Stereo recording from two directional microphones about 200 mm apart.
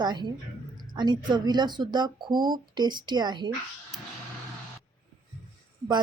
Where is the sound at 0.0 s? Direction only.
20° right (ahead or behind).